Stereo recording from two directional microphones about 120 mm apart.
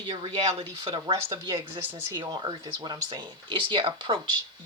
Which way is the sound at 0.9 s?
45° right (ahead or behind).